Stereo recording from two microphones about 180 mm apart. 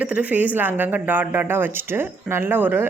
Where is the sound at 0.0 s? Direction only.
5° right (ahead or behind).